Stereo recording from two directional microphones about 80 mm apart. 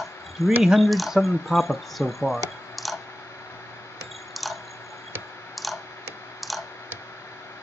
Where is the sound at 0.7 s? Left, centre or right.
Centre.